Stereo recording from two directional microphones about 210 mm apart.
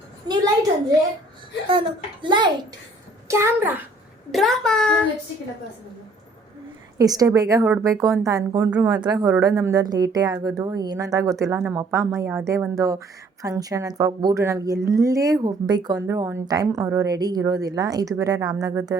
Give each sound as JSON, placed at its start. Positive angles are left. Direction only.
{"t": 1.7, "sound": "a child's voice", "side_deg": -25}
{"t": 4.3, "sound": "a child's voice", "side_deg": 0}
{"t": 7.0, "sound": "a woman's voice", "side_deg": -15}